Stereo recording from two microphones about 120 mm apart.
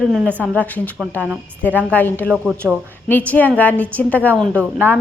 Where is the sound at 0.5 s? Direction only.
10° left (ahead or behind).